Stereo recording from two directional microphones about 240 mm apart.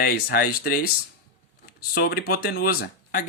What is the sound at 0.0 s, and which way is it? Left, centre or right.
Speech, left.